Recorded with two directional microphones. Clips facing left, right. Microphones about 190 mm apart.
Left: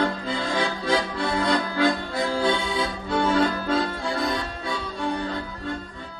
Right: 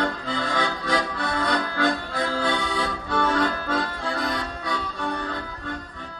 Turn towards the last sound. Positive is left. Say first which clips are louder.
# left 1 dB
turn(degrees=25)  # may be behind; listen again after turning